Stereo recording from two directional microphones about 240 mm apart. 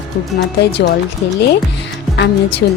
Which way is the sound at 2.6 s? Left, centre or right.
Left.